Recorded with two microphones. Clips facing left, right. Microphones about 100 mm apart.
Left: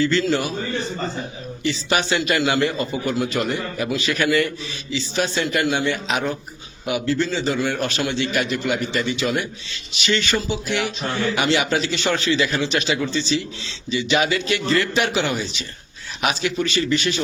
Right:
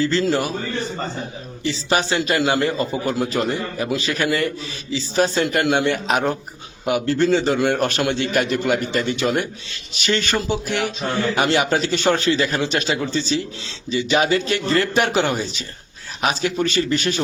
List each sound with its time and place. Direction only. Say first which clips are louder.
0.0 s a man's voice: even; 35° right (ahead or behind)
1.6 s a man's voice: right 1 dB; 30° right (ahead or behind); by 17.2 s 45° right (ahead or behind)